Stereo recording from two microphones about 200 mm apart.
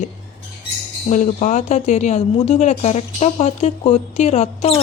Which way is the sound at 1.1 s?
35° left (ahead or behind).